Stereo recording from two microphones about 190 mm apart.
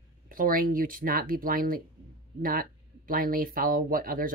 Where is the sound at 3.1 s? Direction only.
50° right (ahead or behind).